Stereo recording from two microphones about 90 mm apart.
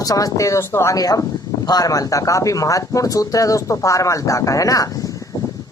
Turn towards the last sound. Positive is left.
turn(degrees=40)  # may be behind; listen again after turning